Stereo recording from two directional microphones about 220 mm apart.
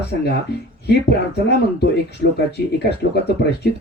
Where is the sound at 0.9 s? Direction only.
50° left (ahead or behind).